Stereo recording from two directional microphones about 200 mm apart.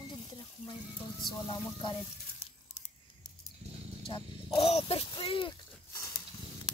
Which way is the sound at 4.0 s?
30° left (ahead or behind).